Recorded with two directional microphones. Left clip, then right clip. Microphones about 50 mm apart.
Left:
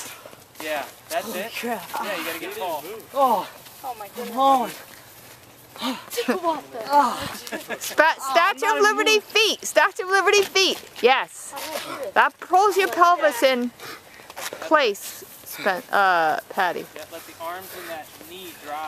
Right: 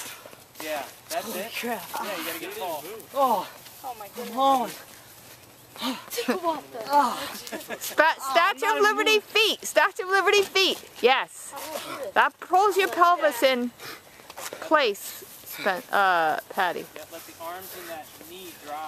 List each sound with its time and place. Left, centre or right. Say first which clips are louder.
1.2 s a woman's voice: left 3 dB; centre
2.0 s speech: left 4 dB; left
5.8 s speech: left 3 dB; centre
7.4 s speech: left 4 dB; left
8.0 s a woman's voice: left 3 dB; centre
11.5 s speech: left 4 dB; left
11.8 s a woman's voice: left 3 dB; centre
14.5 s a sound: left 3 dB; centre
15.5 s a woman's voice: left 3 dB; centre
17.1 s speech: left 5 dB; left